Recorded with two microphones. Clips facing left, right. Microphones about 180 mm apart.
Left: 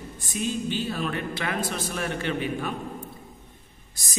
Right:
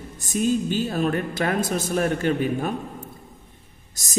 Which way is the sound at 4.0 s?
45° right (ahead or behind).